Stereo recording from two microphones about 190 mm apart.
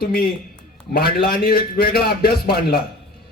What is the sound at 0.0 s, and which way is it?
Speech, 55° left (ahead or behind).